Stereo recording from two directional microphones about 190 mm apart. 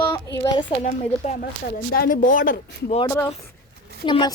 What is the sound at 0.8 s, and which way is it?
Speech, 40° left (ahead or behind).